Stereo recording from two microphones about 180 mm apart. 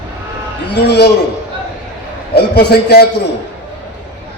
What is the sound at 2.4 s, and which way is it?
Speech, 65° left (ahead or behind).